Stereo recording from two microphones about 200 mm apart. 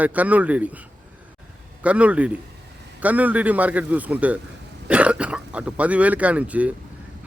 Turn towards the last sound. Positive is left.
turn(degrees=-5)  # may be behind; listen again after turning